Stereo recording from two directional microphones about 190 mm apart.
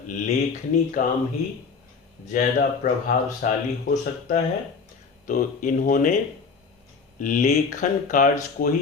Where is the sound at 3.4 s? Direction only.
40° left (ahead or behind).